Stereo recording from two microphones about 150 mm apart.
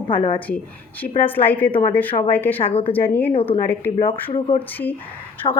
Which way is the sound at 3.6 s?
15° left (ahead or behind).